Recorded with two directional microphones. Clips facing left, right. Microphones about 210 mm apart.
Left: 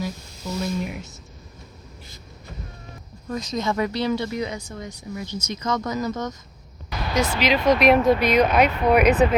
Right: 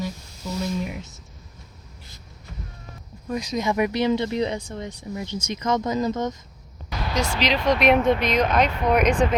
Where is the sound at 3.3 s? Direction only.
10° right (ahead or behind).